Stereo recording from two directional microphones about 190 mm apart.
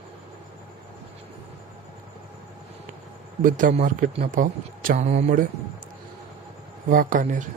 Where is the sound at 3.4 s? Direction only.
45° right (ahead or behind).